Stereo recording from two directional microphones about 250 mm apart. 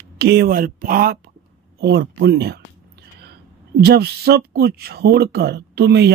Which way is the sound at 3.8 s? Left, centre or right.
Right.